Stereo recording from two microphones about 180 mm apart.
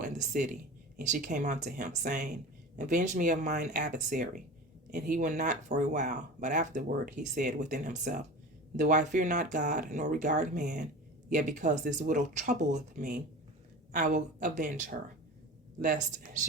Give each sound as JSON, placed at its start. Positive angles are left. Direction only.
{"t": 0.9, "sound": "speech", "side_deg": -45}